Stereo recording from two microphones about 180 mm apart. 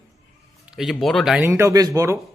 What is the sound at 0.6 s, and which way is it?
Speech, centre (ahead or behind).